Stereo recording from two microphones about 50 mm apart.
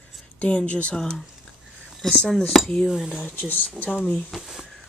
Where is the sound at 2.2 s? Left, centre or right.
Centre.